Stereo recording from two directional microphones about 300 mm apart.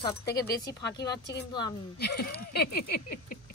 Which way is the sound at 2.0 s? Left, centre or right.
Left.